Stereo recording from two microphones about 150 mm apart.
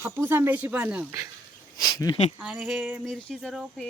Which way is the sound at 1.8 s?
25° left (ahead or behind).